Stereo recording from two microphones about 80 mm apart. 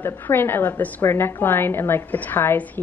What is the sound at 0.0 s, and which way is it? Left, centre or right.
A woman's voice, left.